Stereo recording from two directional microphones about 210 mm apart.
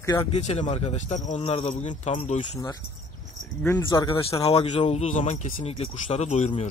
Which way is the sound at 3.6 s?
10° left (ahead or behind).